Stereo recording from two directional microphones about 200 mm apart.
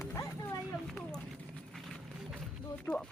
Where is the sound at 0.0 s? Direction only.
15° left (ahead or behind).